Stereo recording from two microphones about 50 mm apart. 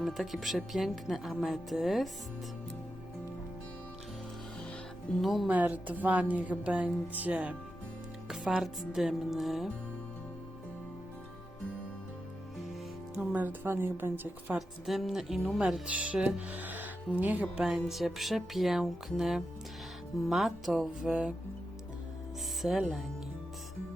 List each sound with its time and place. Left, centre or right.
0.0 s speech: centre
5.2 s speech: centre
5.5 s a woman's voice: right
8.3 s speech: centre
13.3 s a woman's voice: right
13.7 s a woman's voice: right
14.8 s speech: centre
15.9 s speech: right
17.6 s speech: centre
21.1 s speech: right
22.6 s speech: centre